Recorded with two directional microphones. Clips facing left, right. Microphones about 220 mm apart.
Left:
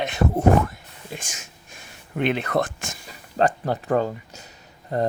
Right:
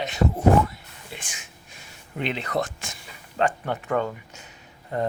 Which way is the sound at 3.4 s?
35° left (ahead or behind).